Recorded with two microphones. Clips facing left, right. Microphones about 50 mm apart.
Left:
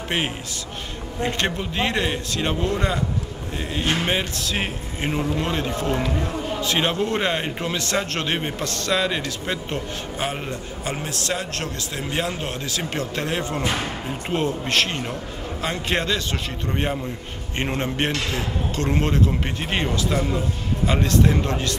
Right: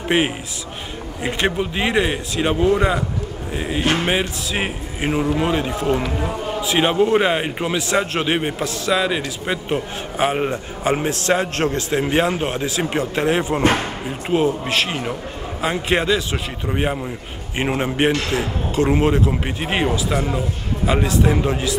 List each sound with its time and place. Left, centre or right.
0.1 s a man's voice: centre
10.2 s a man's voice: right; by 21.7 s centre